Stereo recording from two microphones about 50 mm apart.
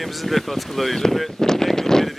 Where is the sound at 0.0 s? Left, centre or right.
Centre.